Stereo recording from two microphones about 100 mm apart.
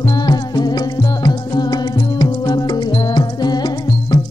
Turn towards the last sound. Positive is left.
turn(degrees=45)  # may be behind; listen again after turning